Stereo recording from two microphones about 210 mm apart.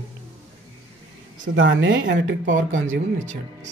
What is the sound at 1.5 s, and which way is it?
Speech, 60° right (ahead or behind).